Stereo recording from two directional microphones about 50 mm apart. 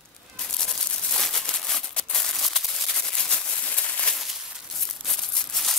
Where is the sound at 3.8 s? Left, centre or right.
Left.